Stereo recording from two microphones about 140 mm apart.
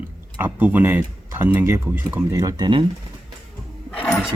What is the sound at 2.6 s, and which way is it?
Speech, 35° right (ahead or behind).